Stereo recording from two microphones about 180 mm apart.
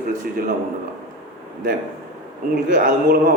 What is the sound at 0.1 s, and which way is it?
Speech, 45° right (ahead or behind).